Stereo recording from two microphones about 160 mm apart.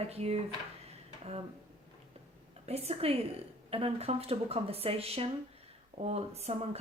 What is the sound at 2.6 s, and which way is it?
Speech, 40° right (ahead or behind).